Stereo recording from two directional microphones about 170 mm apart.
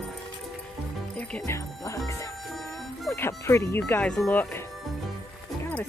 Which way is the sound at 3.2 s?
15° left (ahead or behind).